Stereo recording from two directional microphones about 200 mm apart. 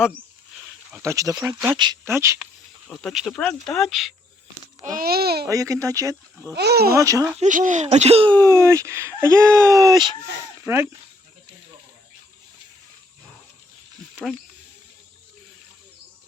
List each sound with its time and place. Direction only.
0.9 s speech: 15° right (ahead or behind)
2.8 s speech: 5° left (ahead or behind)
4.9 s a child's voice: 50° right (ahead or behind)
5.5 s speech: 15° right (ahead or behind)
6.6 s a child's voice: 55° right (ahead or behind)
6.9 s speech: 15° right (ahead or behind)
7.3 s speech: 40° right (ahead or behind); by 10.8 s 10° right (ahead or behind)